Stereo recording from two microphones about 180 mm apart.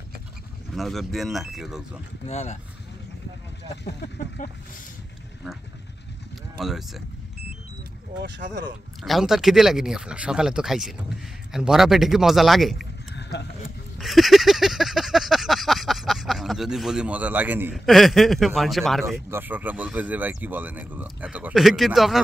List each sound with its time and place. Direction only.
0.7 s speech: centre (ahead or behind)
2.2 s speech: 40° left (ahead or behind)
3.6 s speech: 70° left (ahead or behind)
4.4 s speech: 45° left (ahead or behind)
6.6 s speech: centre (ahead or behind)
8.2 s speech: 50° right (ahead or behind)
9.0 s speech: centre (ahead or behind)
13.1 s a sound: 70° left (ahead or behind)
13.9 s a sound: centre (ahead or behind)
17.7 s speech: centre (ahead or behind)
19.0 s speech: 10° right (ahead or behind)